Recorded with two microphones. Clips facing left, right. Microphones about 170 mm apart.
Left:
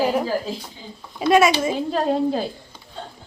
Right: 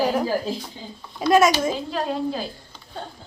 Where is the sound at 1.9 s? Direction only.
45° left (ahead or behind).